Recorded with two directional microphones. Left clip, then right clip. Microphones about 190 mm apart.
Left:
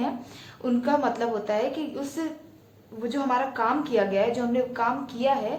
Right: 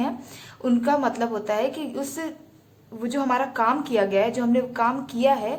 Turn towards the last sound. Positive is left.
turn(degrees=-25)  # may be behind; listen again after turning